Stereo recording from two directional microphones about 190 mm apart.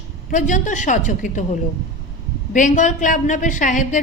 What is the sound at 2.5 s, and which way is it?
A woman's voice, 40° left (ahead or behind).